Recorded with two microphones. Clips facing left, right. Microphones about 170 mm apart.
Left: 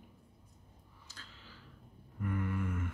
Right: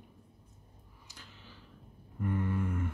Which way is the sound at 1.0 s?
15° right (ahead or behind).